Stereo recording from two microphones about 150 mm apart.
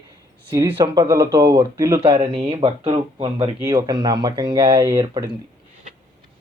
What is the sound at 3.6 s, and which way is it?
Speech, 25° right (ahead or behind).